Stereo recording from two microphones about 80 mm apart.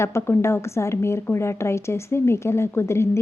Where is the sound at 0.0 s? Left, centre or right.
Left.